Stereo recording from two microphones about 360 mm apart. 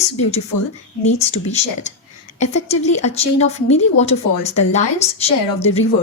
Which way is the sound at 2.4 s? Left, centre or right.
Centre.